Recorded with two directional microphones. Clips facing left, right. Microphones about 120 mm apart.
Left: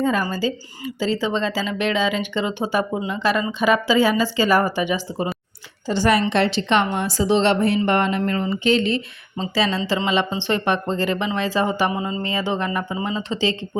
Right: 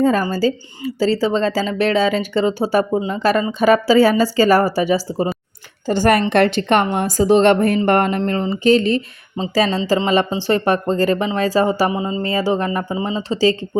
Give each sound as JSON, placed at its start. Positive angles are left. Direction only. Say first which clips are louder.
{"t": 0.0, "sound": "speech", "louder": "right 5 dB", "side_deg": -35}
{"t": 5.9, "sound": "a woman's voice", "louder": "right 4 dB", "side_deg": -50}
{"t": 8.2, "sound": "speech", "louder": "right 4 dB", "side_deg": -30}
{"t": 12.2, "sound": "speech", "louder": "right 7 dB", "side_deg": -35}